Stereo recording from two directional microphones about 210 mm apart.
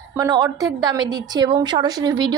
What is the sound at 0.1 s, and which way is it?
A woman's voice, 15° right (ahead or behind).